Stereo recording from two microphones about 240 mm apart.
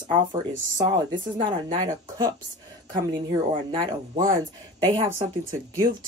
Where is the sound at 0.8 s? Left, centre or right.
Centre.